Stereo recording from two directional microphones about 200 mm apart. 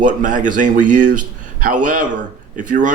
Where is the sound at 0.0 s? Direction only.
40° right (ahead or behind).